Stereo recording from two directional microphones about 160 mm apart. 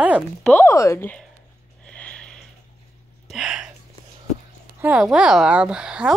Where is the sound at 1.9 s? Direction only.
5° left (ahead or behind).